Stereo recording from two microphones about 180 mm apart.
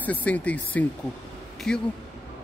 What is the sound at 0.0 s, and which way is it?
Speech, 10° left (ahead or behind).